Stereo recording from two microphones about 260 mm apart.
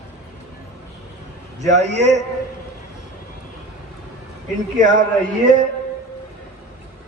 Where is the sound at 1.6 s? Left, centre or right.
Right.